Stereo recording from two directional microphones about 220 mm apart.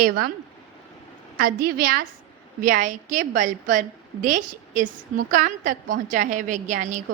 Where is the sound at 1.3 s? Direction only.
45° right (ahead or behind).